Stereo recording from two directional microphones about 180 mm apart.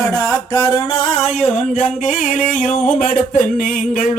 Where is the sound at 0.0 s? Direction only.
20° left (ahead or behind).